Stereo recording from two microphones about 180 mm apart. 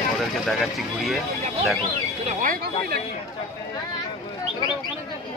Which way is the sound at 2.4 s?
55° right (ahead or behind).